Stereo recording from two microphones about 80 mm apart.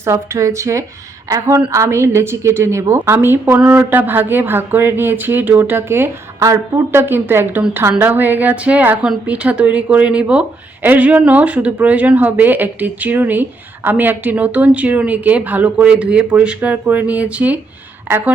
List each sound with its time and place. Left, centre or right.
0.0 s speech: right
6.4 s speech: right
6.9 s speech: right